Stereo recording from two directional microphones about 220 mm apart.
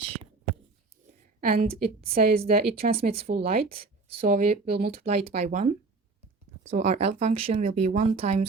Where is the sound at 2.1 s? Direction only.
40° right (ahead or behind).